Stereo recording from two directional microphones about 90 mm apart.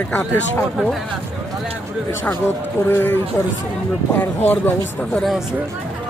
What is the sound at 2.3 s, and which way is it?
Speech, 25° left (ahead or behind).